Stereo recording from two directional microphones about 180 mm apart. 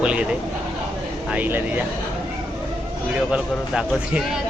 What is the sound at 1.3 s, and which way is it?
Speech, 10° right (ahead or behind).